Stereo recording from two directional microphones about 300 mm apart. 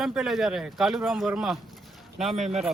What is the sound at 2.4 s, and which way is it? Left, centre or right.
Speech, right.